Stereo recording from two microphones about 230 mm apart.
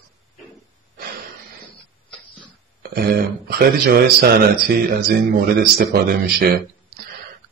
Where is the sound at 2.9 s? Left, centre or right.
Right.